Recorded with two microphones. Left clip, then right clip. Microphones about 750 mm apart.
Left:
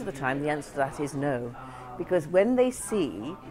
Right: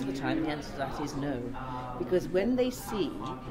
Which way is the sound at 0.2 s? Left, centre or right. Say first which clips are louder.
Left 5 dB; left.